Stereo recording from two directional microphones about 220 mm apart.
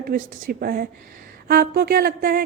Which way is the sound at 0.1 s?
40° right (ahead or behind).